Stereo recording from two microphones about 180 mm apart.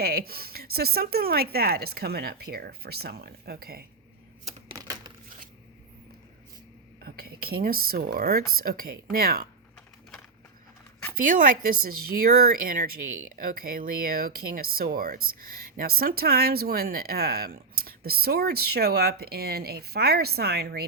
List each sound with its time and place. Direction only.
0.0 s speech: 55° right (ahead or behind)
4.7 s a sound: 20° right (ahead or behind)
7.0 s speech: 55° right (ahead or behind)
11.2 s speech: 50° right (ahead or behind)